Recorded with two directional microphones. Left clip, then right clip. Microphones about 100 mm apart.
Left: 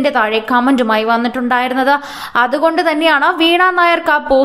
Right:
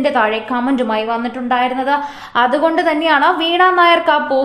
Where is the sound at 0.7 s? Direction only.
40° left (ahead or behind); by 3.4 s 25° left (ahead or behind).